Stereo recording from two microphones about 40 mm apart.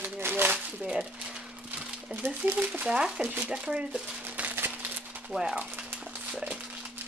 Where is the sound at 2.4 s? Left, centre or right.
Right.